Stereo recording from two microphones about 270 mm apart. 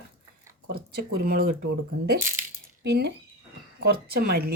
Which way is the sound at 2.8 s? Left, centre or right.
Right.